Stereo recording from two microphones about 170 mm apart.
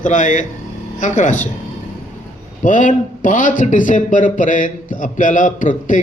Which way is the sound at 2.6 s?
50° left (ahead or behind).